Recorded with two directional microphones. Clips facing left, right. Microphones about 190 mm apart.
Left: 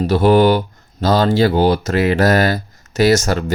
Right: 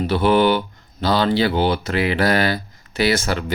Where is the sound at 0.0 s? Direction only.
40° left (ahead or behind).